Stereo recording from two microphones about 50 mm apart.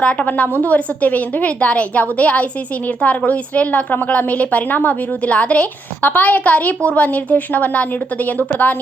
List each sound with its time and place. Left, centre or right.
0.0 s a woman's voice: left